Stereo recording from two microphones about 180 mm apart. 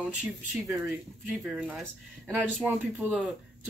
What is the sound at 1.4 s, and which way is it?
Speech, 5° right (ahead or behind).